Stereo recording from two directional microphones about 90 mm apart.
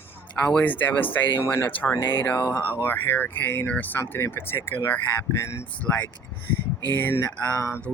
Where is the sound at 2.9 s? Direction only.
25° left (ahead or behind).